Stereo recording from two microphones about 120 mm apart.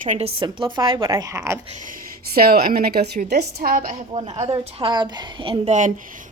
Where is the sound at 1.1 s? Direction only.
25° right (ahead or behind).